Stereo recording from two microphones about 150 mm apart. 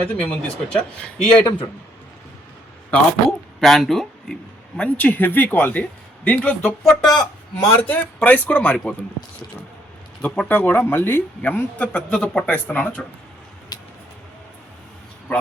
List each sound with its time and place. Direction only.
0.0 s speech: 10° left (ahead or behind)
1.5 s a man's voice: 25° left (ahead or behind)
2.9 s a man's voice: 5° left (ahead or behind)
4.8 s speech: 10° left (ahead or behind)
7.8 s speech: 10° left (ahead or behind)
10.2 s speech: 5° left (ahead or behind)
13.7 s a sound: 25° left (ahead or behind)